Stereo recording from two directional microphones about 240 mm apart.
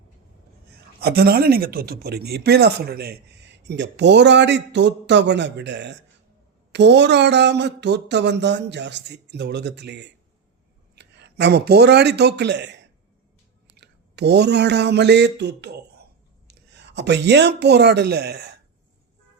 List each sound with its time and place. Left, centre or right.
0.9 s speech: right
13.7 s a sound: right
16.5 s speech: right